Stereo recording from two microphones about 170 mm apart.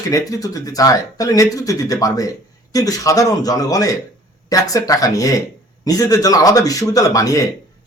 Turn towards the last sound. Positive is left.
turn(degrees=20)  # may be behind; listen again after turning